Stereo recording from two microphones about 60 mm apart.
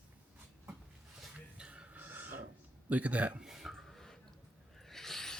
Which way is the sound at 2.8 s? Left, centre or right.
Right.